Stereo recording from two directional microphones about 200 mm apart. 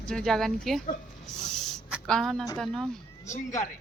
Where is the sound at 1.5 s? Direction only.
Centre (ahead or behind).